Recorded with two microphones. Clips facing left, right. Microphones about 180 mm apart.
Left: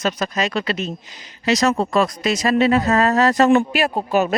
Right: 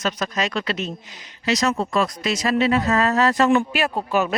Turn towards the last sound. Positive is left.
turn(degrees=40)  # may be behind; listen again after turning